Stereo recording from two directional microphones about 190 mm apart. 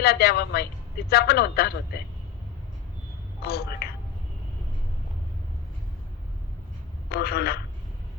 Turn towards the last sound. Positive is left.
turn(degrees=55)  # may be behind; listen again after turning